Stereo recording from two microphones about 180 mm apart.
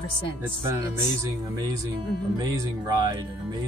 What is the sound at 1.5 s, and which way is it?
Speech, 20° right (ahead or behind).